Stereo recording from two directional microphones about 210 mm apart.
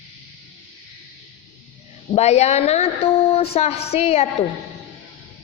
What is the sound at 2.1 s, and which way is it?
A woman's voice, 30° left (ahead or behind).